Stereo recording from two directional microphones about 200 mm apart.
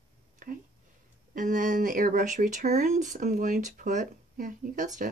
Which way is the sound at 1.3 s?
40° right (ahead or behind).